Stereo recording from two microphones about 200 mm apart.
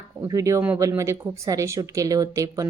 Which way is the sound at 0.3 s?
15° right (ahead or behind).